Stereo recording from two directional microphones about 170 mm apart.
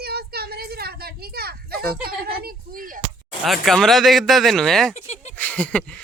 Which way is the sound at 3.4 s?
Centre (ahead or behind).